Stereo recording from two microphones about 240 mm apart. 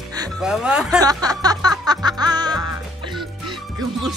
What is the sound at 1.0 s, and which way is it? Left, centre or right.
Speech, centre.